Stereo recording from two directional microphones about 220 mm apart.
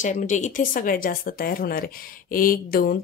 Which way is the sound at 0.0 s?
35° left (ahead or behind).